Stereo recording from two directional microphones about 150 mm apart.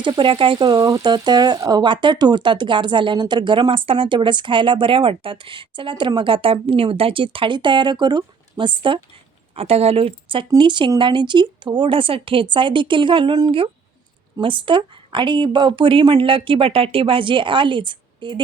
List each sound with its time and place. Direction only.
0.0 s speech: 35° right (ahead or behind)